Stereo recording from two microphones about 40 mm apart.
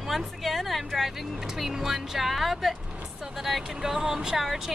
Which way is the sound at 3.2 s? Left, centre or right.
Centre.